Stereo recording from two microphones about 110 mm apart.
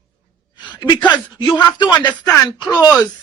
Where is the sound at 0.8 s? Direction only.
40° left (ahead or behind).